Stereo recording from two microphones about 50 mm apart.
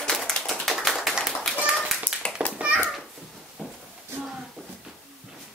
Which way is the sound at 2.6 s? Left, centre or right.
Right.